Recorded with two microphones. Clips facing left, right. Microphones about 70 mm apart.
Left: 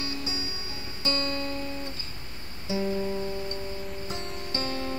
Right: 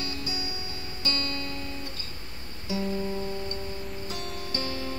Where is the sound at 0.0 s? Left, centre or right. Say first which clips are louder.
Left 1 dB; left.